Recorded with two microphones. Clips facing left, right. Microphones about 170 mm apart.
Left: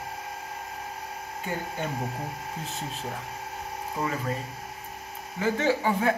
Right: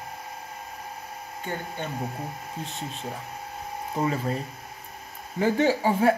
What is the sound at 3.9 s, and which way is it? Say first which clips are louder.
Speech: right 4 dB; 30° right (ahead or behind).